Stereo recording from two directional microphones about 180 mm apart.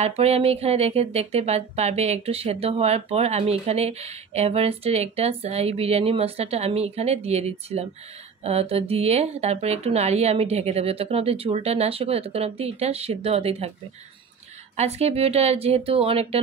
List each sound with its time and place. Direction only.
0.0 s speech: 35° right (ahead or behind)
14.8 s speech: 35° right (ahead or behind)